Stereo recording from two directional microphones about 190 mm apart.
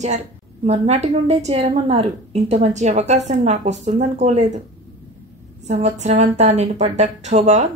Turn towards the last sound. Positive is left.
turn(degrees=-35)  # may be behind; listen again after turning